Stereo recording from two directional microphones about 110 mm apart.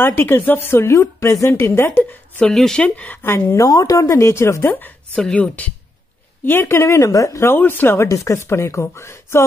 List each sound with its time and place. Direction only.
0.0 s speech: 20° left (ahead or behind)
2.4 s speech: 5° left (ahead or behind); by 9.4 s 25° left (ahead or behind)